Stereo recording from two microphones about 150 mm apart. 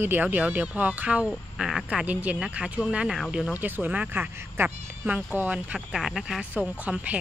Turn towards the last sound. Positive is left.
turn(degrees=-10)  # may be behind; listen again after turning